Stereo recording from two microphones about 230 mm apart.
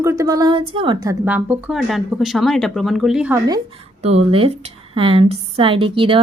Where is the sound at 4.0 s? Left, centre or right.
Right.